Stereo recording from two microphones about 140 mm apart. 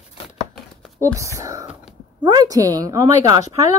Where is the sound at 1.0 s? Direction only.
20° right (ahead or behind).